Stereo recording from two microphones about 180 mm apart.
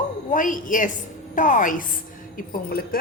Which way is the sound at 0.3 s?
45° left (ahead or behind).